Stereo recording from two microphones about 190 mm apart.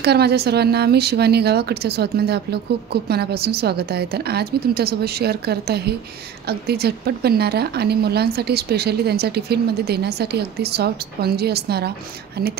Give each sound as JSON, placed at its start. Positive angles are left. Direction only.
{"t": 0.0, "sound": "a woman's voice", "side_deg": -60}